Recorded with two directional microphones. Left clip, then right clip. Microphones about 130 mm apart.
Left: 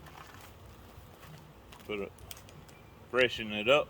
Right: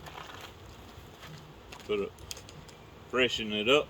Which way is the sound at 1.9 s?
25° left (ahead or behind).